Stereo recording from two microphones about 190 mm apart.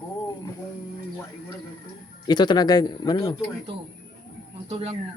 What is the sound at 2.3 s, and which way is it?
Speech, 20° left (ahead or behind).